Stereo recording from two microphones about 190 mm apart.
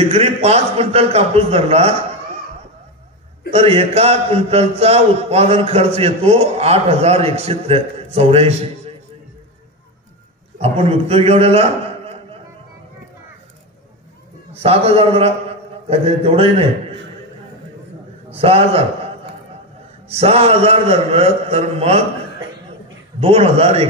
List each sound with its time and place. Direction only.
0.0 s a man's voice: 30° right (ahead or behind)
3.5 s a man's voice: 30° right (ahead or behind)
10.6 s a man's voice: 30° right (ahead or behind)
14.6 s a man's voice: 30° right (ahead or behind)
18.3 s a man's voice: 30° right (ahead or behind)
20.2 s a man's voice: 30° right (ahead or behind)
23.2 s a man's voice: 30° right (ahead or behind)